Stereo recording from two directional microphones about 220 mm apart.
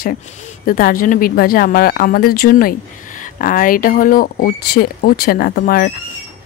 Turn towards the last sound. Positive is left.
turn(degrees=40)  # may be behind; listen again after turning